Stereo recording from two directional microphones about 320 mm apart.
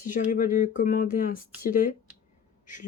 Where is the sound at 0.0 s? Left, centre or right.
Left.